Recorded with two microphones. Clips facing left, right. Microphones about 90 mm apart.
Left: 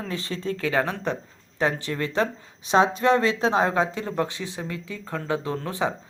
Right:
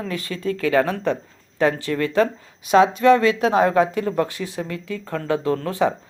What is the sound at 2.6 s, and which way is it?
A woman's voice, 30° left (ahead or behind).